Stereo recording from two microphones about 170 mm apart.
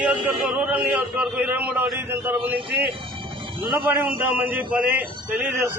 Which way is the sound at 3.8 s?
10° right (ahead or behind).